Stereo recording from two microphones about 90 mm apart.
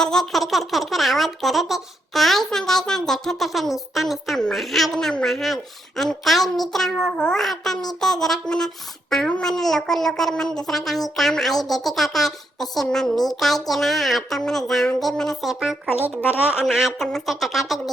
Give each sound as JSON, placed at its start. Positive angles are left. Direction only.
{"t": 0.0, "sound": "speech", "side_deg": 5}
{"t": 16.0, "sound": "a woman's voice", "side_deg": -20}
{"t": 16.6, "sound": "speech", "side_deg": -5}